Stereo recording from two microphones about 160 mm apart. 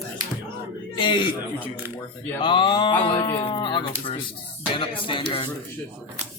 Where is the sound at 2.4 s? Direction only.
30° left (ahead or behind).